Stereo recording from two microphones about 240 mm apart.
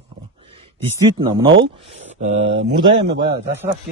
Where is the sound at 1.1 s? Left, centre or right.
Right.